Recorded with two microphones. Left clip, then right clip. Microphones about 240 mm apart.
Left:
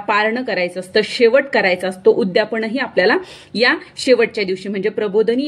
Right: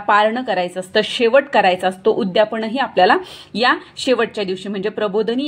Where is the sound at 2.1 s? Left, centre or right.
Centre.